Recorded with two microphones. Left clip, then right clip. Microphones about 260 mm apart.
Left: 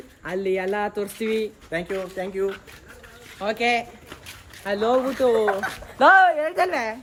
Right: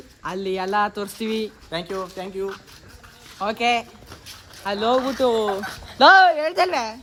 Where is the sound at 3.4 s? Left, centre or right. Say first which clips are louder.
Right 1 dB; right.